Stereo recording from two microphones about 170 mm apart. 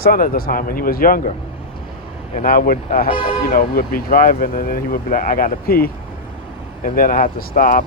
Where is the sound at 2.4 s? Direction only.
60° left (ahead or behind).